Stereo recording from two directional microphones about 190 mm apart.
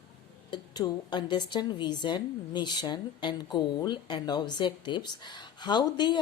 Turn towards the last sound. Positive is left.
turn(degrees=25)  # may be behind; listen again after turning